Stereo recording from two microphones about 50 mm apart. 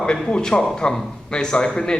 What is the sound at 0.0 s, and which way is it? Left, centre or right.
A man's voice, centre.